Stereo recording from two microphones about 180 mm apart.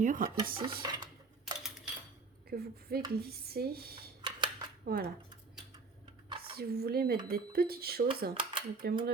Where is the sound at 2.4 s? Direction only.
60° right (ahead or behind).